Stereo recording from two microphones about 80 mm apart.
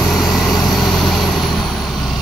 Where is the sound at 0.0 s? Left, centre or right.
Centre.